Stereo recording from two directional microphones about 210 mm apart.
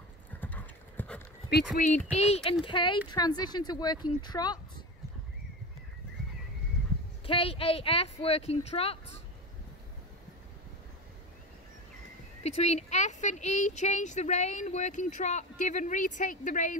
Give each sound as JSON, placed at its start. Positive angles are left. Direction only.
{"t": 0.4, "sound": "clip-clop", "side_deg": 10}
{"t": 1.5, "sound": "speech", "side_deg": 40}
{"t": 7.2, "sound": "speech", "side_deg": 25}
{"t": 12.4, "sound": "speech", "side_deg": 30}